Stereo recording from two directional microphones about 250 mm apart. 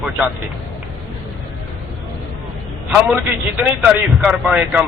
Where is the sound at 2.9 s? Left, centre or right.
Centre.